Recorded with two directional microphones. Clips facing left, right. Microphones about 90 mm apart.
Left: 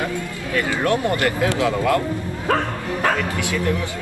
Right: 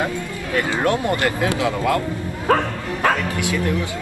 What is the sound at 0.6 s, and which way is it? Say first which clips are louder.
Speech: even; 20° right (ahead or behind).